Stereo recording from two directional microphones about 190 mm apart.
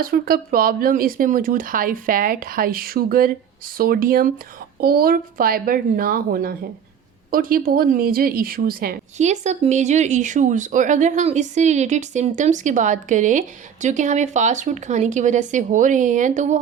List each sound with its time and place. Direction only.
0.0 s speech: 50° right (ahead or behind)